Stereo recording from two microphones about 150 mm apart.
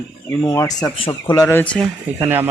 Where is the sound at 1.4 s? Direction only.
15° left (ahead or behind).